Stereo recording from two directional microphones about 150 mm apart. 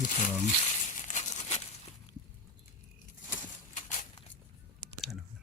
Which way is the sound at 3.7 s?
55° left (ahead or behind).